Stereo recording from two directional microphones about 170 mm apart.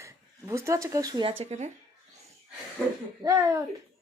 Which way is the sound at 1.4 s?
40° right (ahead or behind).